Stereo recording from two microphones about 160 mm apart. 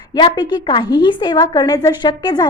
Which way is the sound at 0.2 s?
30° left (ahead or behind).